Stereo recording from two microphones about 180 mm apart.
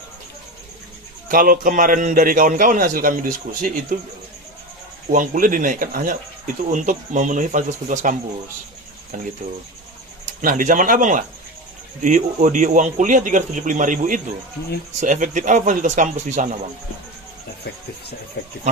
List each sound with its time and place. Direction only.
1.3 s a man's voice: 50° right (ahead or behind)
5.1 s a man's voice: 45° right (ahead or behind)
9.1 s a man's voice: 50° right (ahead or behind)
10.4 s a man's voice: 45° right (ahead or behind)